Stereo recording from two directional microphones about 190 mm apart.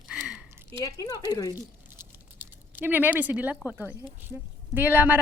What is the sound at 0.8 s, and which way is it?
Speech, 20° left (ahead or behind).